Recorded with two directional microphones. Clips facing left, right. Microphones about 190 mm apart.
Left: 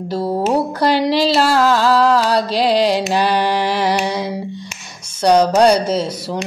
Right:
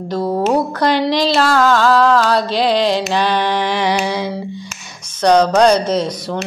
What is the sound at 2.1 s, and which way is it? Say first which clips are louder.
Music: right 1 dB; 35° left (ahead or behind).